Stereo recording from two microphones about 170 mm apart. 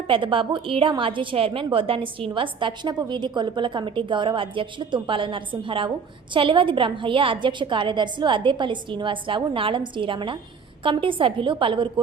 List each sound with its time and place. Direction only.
0.1 s a woman's voice: 30° right (ahead or behind)